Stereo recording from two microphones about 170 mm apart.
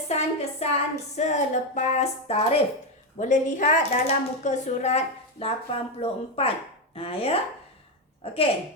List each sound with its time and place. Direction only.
0.1 s speech: 40° left (ahead or behind)
3.2 s a woman's voice: 45° left (ahead or behind)